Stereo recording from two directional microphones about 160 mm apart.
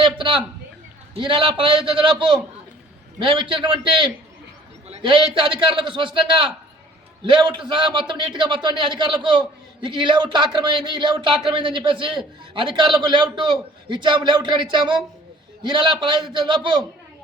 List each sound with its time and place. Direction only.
0.0 s a man's voice: 30° right (ahead or behind)